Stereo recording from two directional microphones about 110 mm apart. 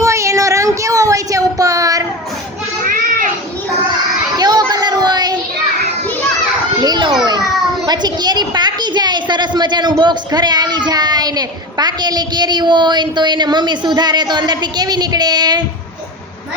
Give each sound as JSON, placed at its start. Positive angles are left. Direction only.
{"t": 0.0, "sound": "child singing", "side_deg": -30}
{"t": 4.4, "sound": "children playing", "side_deg": -35}
{"t": 4.7, "sound": "a sound", "side_deg": -35}
{"t": 6.8, "sound": "children playing", "side_deg": -40}
{"t": 7.9, "sound": "a sound", "side_deg": -40}
{"t": 10.0, "sound": "a child's voice", "side_deg": -40}